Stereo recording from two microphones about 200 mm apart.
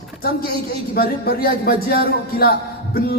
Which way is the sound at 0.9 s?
50° left (ahead or behind).